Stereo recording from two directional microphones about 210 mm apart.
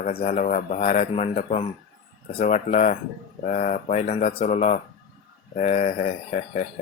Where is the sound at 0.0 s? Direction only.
30° left (ahead or behind).